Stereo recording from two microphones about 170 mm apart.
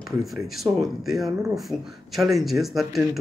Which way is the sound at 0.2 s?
Centre (ahead or behind).